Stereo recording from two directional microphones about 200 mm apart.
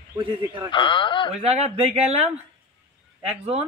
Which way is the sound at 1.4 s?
30° right (ahead or behind).